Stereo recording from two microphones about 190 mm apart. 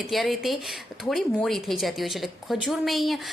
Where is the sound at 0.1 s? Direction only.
Centre (ahead or behind).